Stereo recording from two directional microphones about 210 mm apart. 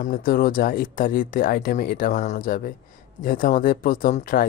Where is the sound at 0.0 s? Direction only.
40° left (ahead or behind).